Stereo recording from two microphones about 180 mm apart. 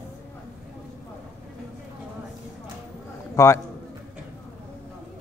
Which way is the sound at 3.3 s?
15° left (ahead or behind).